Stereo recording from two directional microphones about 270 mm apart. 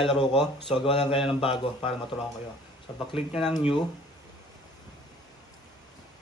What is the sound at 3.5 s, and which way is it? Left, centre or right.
Speech, centre.